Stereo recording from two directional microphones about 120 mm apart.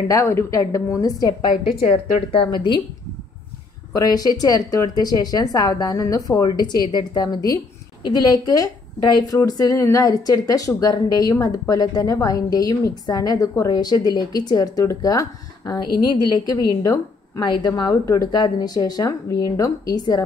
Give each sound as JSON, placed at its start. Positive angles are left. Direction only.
{"t": 0.1, "sound": "a woman's voice", "side_deg": 25}
{"t": 1.5, "sound": "speech", "side_deg": 70}
{"t": 2.3, "sound": "a woman's voice", "side_deg": 40}
{"t": 3.9, "sound": "a woman's voice", "side_deg": 35}